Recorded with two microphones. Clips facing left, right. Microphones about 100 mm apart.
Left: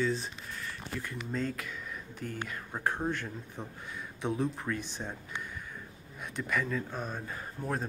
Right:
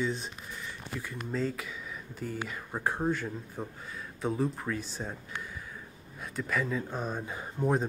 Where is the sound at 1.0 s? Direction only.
Centre (ahead or behind).